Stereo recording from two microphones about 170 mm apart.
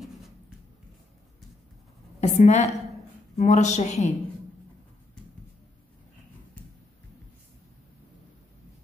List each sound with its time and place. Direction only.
2.1 s a woman's voice: 40° left (ahead or behind)